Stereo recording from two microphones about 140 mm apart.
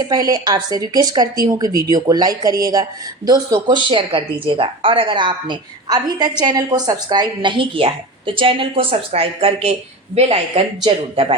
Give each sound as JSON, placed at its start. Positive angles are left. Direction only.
{"t": 0.0, "sound": "speech", "side_deg": -30}